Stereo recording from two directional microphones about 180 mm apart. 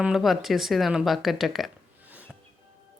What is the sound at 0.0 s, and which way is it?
Speech, centre (ahead or behind).